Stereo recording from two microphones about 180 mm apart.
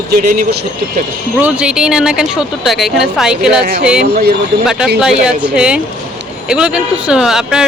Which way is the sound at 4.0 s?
60° right (ahead or behind).